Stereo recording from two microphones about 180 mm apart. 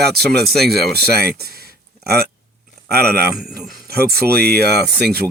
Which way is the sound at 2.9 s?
55° right (ahead or behind).